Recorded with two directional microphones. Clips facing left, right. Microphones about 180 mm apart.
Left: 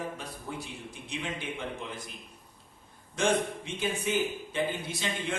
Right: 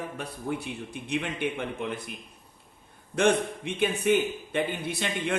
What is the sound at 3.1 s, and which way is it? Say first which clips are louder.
A man's voice: right 4 dB; 60° right (ahead or behind).